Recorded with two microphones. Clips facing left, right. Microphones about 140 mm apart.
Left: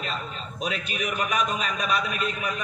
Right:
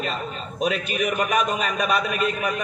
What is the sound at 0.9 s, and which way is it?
A man's voice, 55° right (ahead or behind).